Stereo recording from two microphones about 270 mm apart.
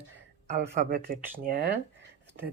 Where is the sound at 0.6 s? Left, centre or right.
Right.